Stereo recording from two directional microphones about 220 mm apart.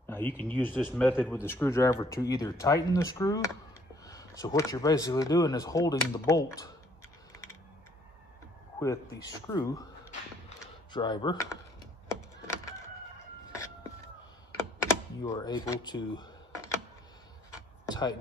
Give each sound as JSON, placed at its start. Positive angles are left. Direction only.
{"t": 0.0, "sound": "a man's voice", "side_deg": 10}
{"t": 8.7, "sound": "a man's voice", "side_deg": 15}
{"t": 10.9, "sound": "speech", "side_deg": 20}
{"t": 14.6, "sound": "computer keyboard", "side_deg": 10}
{"t": 17.8, "sound": "a sound", "side_deg": 20}